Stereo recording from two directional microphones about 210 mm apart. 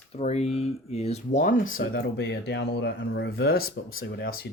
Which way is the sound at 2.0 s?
55° left (ahead or behind).